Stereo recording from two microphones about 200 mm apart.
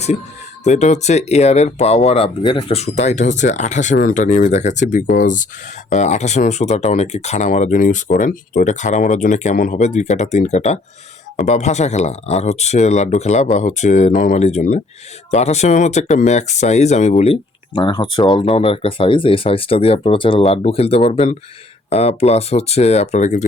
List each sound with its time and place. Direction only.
0.6 s speech: 35° left (ahead or behind)
17.7 s speech: 25° left (ahead or behind)